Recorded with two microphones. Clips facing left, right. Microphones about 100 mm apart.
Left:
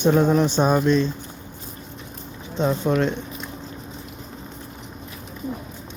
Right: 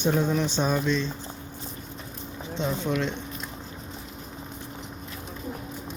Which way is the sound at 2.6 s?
50° left (ahead or behind).